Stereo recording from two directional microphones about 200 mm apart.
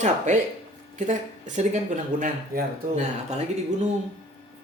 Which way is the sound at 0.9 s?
40° right (ahead or behind).